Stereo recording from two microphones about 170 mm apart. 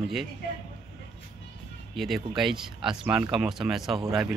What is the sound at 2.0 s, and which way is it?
Speech, centre (ahead or behind).